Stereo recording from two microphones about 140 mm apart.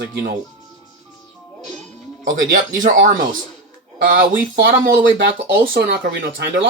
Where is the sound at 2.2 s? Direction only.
70° right (ahead or behind); by 6.0 s 90° right.